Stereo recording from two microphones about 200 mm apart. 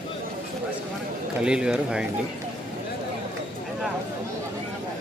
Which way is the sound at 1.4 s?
5° right (ahead or behind).